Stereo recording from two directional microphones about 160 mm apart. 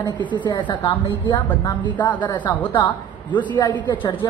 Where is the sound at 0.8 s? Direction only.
15° left (ahead or behind).